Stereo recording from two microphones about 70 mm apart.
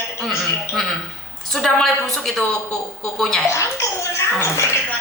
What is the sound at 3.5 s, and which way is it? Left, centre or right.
Speech, left.